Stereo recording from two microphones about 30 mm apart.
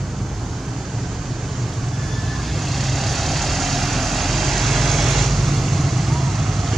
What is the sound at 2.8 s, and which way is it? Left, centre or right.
Vehicle, centre.